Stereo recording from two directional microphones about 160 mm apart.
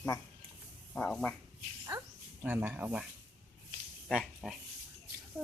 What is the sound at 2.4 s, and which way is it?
Speech, 10° right (ahead or behind).